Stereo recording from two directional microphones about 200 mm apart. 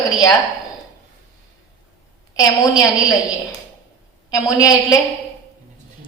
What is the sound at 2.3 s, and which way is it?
Speech, 15° left (ahead or behind).